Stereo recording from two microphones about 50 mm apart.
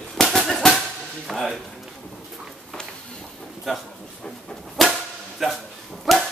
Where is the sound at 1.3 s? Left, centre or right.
Centre.